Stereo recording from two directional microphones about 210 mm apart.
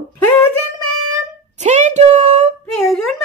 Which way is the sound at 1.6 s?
35° right (ahead or behind).